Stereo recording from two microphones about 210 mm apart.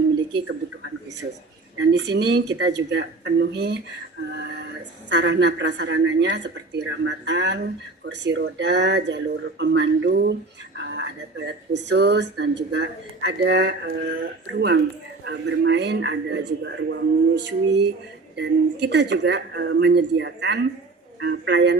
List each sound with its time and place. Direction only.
1.8 s a woman's voice: 55° right (ahead or behind)